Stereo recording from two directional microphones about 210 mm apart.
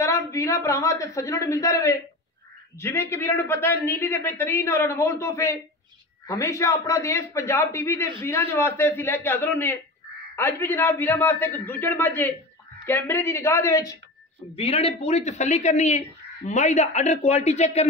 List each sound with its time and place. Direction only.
0.0 s speech: 15° left (ahead or behind)
14.5 s a man's voice: 25° left (ahead or behind)